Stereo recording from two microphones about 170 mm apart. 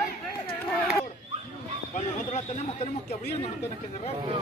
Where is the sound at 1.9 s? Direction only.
45° left (ahead or behind).